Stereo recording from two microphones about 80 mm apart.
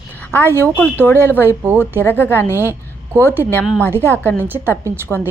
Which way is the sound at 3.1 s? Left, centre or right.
Right.